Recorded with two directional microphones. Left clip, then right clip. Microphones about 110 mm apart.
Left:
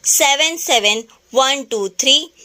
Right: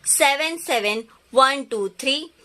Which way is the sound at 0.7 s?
35° left (ahead or behind).